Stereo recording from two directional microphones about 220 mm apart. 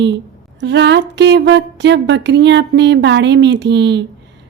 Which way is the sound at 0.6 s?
50° right (ahead or behind).